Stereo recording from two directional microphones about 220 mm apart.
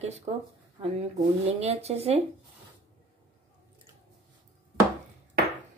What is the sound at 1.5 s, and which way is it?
Speech, 30° right (ahead or behind).